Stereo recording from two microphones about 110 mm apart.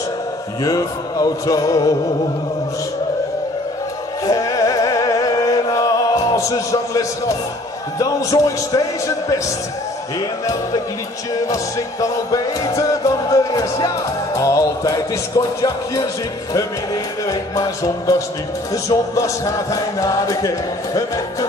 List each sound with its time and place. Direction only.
0.7 s music: 35° left (ahead or behind)
4.3 s music: 30° left (ahead or behind)
10.4 s music: 35° left (ahead or behind)